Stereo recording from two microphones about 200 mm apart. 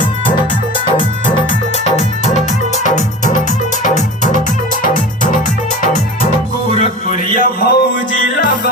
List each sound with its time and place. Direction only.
1.8 s music: 35° left (ahead or behind)
6.7 s music: 35° left (ahead or behind)